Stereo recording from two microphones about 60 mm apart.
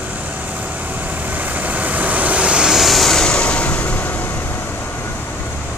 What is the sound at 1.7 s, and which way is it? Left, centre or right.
Vehicle, right.